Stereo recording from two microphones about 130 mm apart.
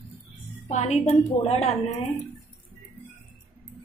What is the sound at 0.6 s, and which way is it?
A woman's voice, 60° left (ahead or behind).